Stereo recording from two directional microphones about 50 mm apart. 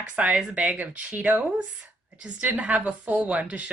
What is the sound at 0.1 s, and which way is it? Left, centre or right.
A woman's voice, right.